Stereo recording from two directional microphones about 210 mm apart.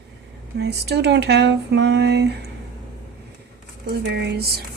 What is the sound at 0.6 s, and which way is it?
Speech, 50° right (ahead or behind).